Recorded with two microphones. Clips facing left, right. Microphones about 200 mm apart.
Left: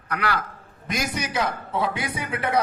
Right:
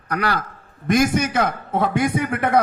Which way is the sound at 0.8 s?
50° right (ahead or behind).